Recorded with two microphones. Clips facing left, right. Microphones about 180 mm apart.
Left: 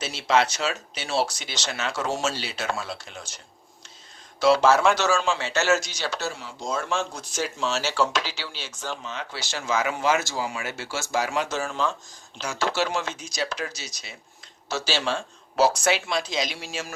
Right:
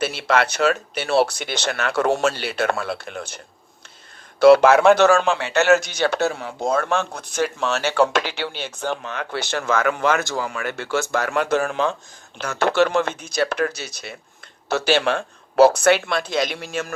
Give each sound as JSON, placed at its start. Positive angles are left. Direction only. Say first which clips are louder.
{"t": 0.0, "sound": "a man's voice", "louder": "right 2 dB", "side_deg": -60}